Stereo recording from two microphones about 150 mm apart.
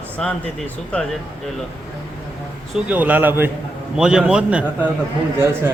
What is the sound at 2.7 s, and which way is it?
A man's voice, 10° right (ahead or behind).